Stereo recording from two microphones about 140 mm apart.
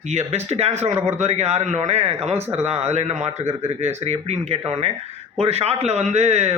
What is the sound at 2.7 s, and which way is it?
A man's voice, 50° right (ahead or behind).